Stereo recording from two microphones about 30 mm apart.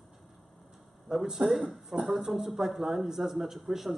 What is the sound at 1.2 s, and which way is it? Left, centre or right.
A man's voice, centre.